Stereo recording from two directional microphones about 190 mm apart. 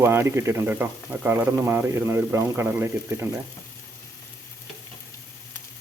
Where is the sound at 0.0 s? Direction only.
15° right (ahead or behind).